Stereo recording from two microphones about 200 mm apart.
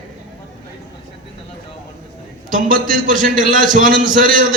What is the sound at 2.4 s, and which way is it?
A man's voice, 45° right (ahead or behind).